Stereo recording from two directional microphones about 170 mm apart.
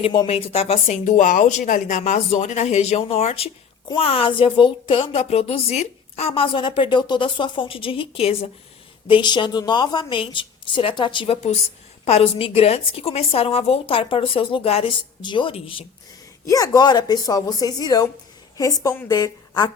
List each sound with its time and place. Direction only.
0.0 s a woman's voice: 30° left (ahead or behind)
16.5 s a woman's voice: 20° left (ahead or behind)